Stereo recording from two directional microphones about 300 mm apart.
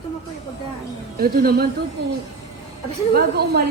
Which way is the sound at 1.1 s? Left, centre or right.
Right.